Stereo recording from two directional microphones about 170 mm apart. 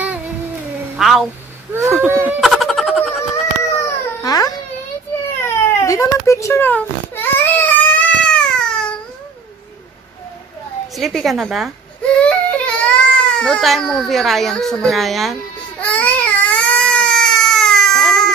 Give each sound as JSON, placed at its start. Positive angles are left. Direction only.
{"t": 0.9, "sound": "a woman's voice", "side_deg": 0}
{"t": 1.7, "sound": "a sound", "side_deg": -15}
{"t": 2.2, "sound": "a sound", "side_deg": 0}
{"t": 3.7, "sound": "baby cry", "side_deg": 20}
{"t": 11.0, "sound": "a woman's voice", "side_deg": 0}
{"t": 12.2, "sound": "baby cry", "side_deg": 5}